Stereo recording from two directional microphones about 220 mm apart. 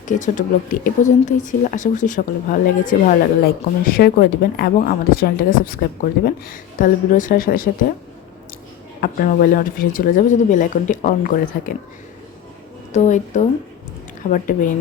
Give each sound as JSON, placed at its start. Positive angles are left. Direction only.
{"t": 0.0, "sound": "speech", "side_deg": 35}
{"t": 9.0, "sound": "speech", "side_deg": 40}
{"t": 12.9, "sound": "speech", "side_deg": 35}